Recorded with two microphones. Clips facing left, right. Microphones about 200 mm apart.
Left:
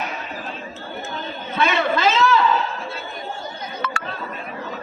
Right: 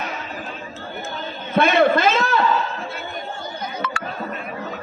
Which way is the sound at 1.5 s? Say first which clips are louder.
Right 5 dB; 55° right (ahead or behind).